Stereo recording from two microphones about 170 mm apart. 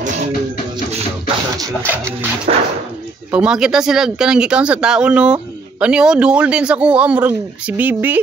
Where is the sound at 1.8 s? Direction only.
15° right (ahead or behind).